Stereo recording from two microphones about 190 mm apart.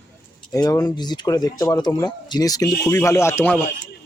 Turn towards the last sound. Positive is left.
turn(degrees=10)  # may be behind; listen again after turning